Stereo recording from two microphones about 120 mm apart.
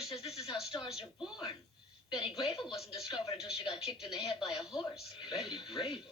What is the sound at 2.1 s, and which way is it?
Speech, 40° left (ahead or behind).